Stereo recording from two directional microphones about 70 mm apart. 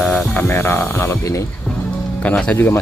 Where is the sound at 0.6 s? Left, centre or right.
Left.